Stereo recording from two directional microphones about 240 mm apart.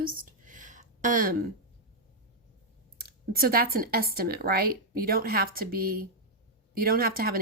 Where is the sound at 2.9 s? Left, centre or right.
Right.